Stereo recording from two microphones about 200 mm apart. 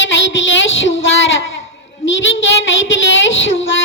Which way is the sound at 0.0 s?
65° left (ahead or behind).